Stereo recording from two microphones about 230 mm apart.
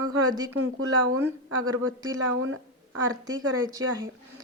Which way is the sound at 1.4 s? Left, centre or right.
Right.